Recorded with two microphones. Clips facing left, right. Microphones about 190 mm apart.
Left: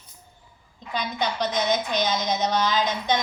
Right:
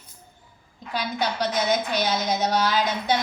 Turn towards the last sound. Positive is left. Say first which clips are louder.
# even
turn(degrees=-10)  # may be behind; listen again after turning